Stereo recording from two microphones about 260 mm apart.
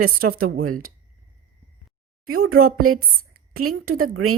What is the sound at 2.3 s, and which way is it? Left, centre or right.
A woman's voice, right.